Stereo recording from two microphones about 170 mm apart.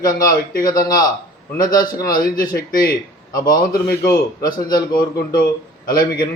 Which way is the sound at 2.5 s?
55° left (ahead or behind).